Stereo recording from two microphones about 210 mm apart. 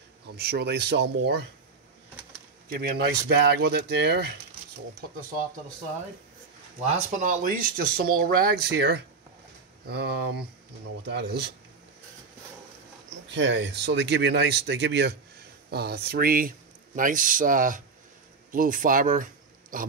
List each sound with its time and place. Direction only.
0.4 s speech: 50° right (ahead or behind)
2.7 s speech: 50° right (ahead or behind)
6.8 s speech: 35° right (ahead or behind); by 11.5 s 50° right (ahead or behind)
13.3 s speech: 60° right (ahead or behind); by 19.9 s 40° right (ahead or behind)